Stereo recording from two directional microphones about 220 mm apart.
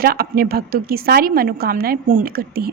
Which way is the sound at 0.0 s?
45° right (ahead or behind).